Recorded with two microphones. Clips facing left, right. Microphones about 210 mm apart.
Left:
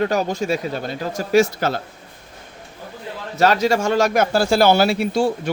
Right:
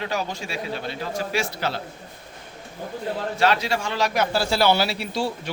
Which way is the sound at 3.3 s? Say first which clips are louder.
Left 7 dB; 45° left (ahead or behind).